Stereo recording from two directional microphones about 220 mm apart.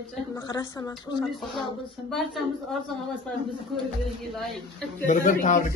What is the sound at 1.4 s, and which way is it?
Speech, centre (ahead or behind).